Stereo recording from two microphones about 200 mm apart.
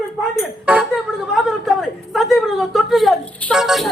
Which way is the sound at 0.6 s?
5° right (ahead or behind).